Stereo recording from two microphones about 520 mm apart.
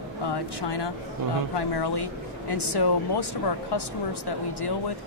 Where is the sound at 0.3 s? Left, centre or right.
Left.